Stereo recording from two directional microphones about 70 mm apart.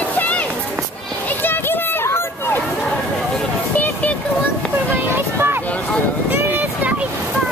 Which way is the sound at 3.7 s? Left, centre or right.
Left.